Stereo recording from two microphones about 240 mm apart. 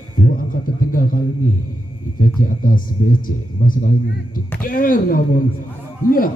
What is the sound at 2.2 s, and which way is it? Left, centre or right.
A man's voice, left.